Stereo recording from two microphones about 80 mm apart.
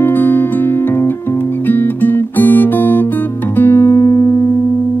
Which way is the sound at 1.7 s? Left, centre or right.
Left.